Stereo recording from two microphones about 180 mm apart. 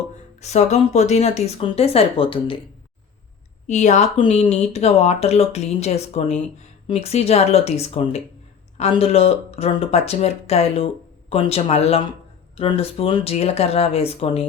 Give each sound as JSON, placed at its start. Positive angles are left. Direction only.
{"t": 0.3, "sound": "speech", "side_deg": 40}
{"t": 3.7, "sound": "speech", "side_deg": 40}